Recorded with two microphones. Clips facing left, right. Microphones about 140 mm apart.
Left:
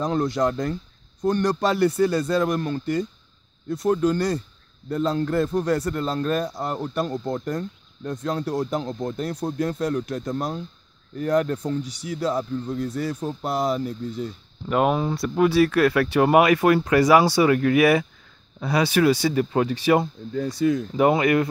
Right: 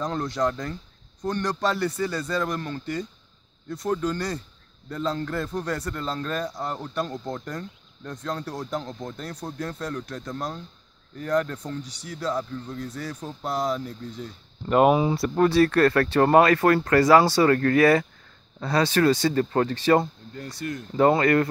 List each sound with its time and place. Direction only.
0.0 s speech: 10° left (ahead or behind)
7.1 s speech: 25° left (ahead or behind)
8.3 s speech: 10° left (ahead or behind)